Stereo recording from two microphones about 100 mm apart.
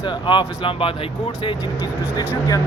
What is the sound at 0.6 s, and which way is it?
Speech, 65° left (ahead or behind).